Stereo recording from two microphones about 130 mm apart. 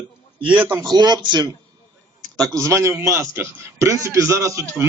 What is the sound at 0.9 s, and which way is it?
Speech, 35° right (ahead or behind).